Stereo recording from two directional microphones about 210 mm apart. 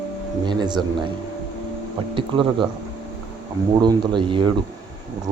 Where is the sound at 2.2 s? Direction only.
25° right (ahead or behind).